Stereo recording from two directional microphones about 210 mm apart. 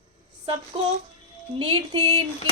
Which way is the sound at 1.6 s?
25° right (ahead or behind).